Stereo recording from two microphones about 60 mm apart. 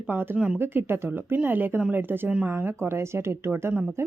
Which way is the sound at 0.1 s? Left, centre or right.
Right.